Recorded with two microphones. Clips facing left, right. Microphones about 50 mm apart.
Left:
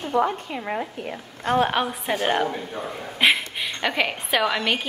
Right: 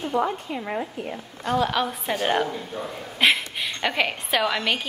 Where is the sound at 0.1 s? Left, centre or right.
Left.